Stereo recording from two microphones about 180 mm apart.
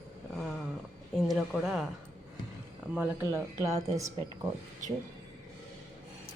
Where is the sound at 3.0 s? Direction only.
15° right (ahead or behind).